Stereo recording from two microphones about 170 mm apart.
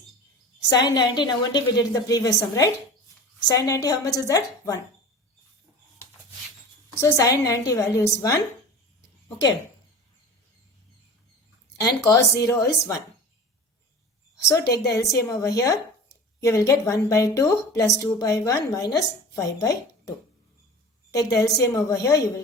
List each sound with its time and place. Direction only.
0.7 s a woman's voice: 25° left (ahead or behind)
7.0 s a woman's voice: 20° left (ahead or behind)
11.8 s a woman's voice: 20° left (ahead or behind)
14.3 s a woman's voice: 20° left (ahead or behind)
21.1 s a woman's voice: 20° left (ahead or behind)